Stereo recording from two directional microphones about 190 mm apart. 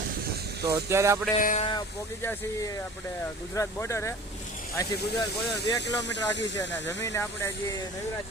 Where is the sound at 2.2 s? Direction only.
10° left (ahead or behind).